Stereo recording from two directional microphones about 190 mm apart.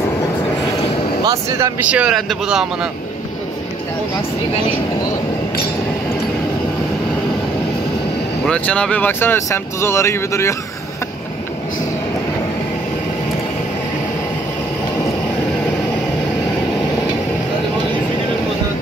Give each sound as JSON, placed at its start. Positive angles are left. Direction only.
{"t": 1.2, "sound": "speech", "side_deg": -20}
{"t": 1.9, "sound": "a man's voice", "side_deg": -5}
{"t": 8.5, "sound": "speech", "side_deg": 5}